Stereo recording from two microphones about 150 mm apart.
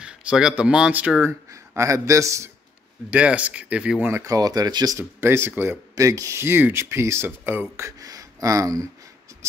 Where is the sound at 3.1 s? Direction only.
10° right (ahead or behind).